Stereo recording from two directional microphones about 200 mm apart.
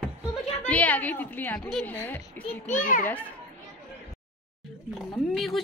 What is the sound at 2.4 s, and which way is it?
Speech, 40° left (ahead or behind).